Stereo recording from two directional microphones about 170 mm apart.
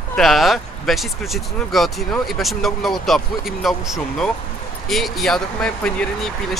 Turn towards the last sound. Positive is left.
turn(degrees=5)  # may be behind; listen again after turning